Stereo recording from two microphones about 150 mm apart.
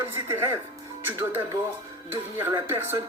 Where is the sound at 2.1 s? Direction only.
15° right (ahead or behind).